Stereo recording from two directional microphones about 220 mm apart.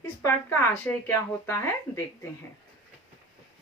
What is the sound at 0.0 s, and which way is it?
Speech, 10° left (ahead or behind).